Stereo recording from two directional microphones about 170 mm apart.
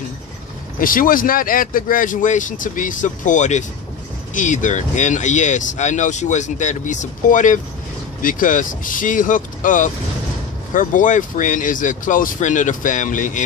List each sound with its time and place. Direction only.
0.7 s speech: 55° left (ahead or behind)